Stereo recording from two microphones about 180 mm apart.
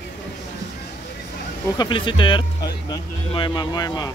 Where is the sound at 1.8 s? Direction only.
25° left (ahead or behind).